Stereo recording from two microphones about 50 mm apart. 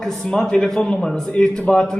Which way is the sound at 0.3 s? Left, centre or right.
Centre.